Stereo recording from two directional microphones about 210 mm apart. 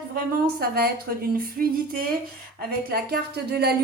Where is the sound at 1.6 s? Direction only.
40° right (ahead or behind).